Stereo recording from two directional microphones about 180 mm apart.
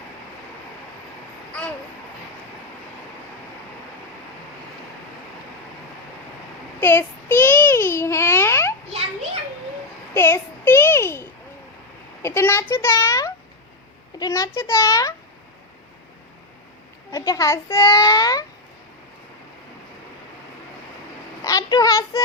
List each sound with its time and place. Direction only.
6.7 s a child's voice: 10° left (ahead or behind)
10.2 s a sound: 15° left (ahead or behind)
12.2 s a child's voice: 15° left (ahead or behind)
17.1 s a child's voice: 20° left (ahead or behind)
21.4 s speech: 20° left (ahead or behind)